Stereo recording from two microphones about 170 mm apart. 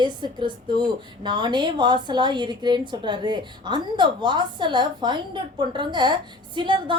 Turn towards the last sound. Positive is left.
turn(degrees=-30)  # may be behind; listen again after turning